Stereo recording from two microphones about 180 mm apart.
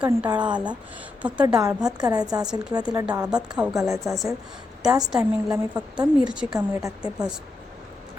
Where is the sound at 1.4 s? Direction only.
20° right (ahead or behind).